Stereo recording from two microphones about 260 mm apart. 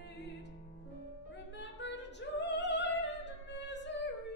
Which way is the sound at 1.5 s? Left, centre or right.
Left.